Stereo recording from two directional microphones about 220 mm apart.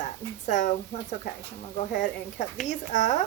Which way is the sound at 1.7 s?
35° left (ahead or behind).